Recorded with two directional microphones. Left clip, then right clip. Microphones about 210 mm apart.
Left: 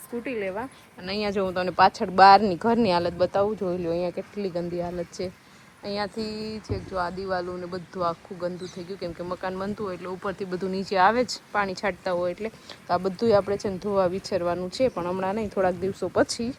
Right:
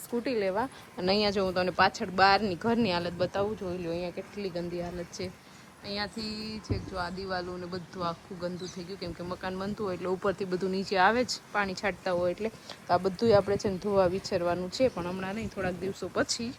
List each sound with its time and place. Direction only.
0.3 s speech: 5° right (ahead or behind)
0.9 s speech: 15° right (ahead or behind)
1.2 s speech: 5° right (ahead or behind)